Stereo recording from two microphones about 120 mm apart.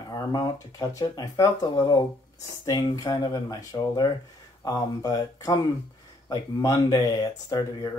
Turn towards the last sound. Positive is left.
turn(degrees=30)  # may be behind; listen again after turning